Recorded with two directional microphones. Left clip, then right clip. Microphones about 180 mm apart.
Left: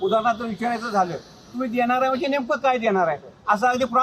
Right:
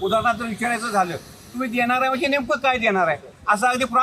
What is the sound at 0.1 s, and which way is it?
A man's voice, 15° right (ahead or behind).